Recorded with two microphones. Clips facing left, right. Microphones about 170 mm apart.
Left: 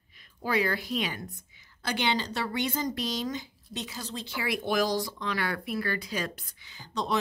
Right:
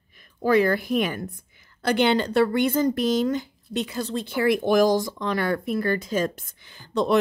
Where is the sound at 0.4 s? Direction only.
50° right (ahead or behind).